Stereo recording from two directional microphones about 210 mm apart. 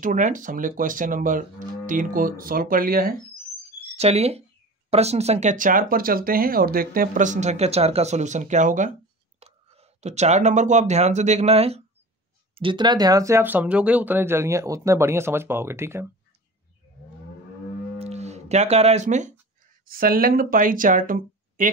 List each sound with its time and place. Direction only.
0.0 s speech: 40° right (ahead or behind)
3.9 s speech: 30° right (ahead or behind); by 16.1 s 10° right (ahead or behind)
17.9 s livestock: 30° right (ahead or behind)
19.9 s speech: 45° right (ahead or behind)